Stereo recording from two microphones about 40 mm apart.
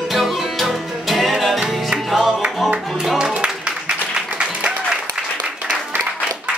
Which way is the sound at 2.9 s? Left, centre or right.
Centre.